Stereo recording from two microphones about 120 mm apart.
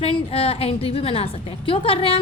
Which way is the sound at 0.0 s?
55° left (ahead or behind).